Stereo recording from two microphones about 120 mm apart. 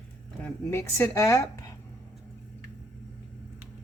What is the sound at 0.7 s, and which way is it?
Speech, 25° left (ahead or behind).